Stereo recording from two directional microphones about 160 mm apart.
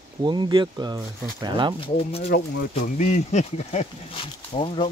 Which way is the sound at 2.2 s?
90° left.